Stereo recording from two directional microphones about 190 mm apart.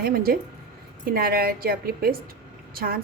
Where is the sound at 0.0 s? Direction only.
50° right (ahead or behind).